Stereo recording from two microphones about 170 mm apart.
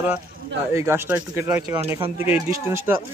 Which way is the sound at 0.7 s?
15° right (ahead or behind).